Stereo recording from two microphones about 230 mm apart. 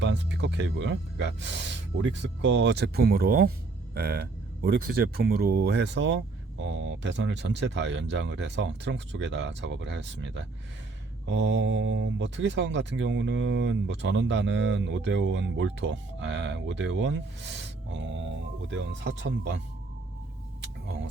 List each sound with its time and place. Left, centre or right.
0.0 s speech: right